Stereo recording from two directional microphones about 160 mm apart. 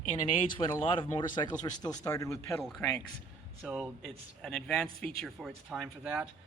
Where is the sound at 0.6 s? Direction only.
35° left (ahead or behind).